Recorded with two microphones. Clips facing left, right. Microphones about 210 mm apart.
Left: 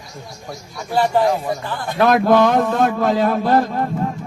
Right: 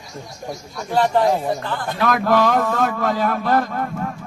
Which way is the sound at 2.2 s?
25° left (ahead or behind).